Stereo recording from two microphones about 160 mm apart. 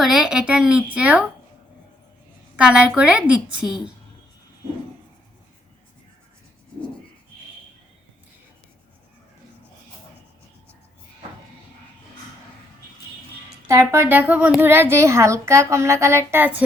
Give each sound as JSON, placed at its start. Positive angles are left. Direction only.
{"t": 0.0, "sound": "speech", "side_deg": -5}
{"t": 2.6, "sound": "a child's voice", "side_deg": -5}
{"t": 13.7, "sound": "a child's voice", "side_deg": -15}